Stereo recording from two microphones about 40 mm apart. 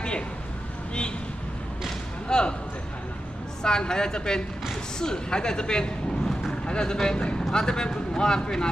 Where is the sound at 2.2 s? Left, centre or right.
Left.